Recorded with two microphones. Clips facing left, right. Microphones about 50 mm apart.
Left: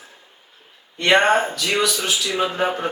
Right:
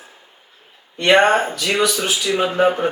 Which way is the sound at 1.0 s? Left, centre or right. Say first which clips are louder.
Right 2 dB; centre.